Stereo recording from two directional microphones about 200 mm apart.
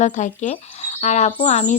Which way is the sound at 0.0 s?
35° left (ahead or behind).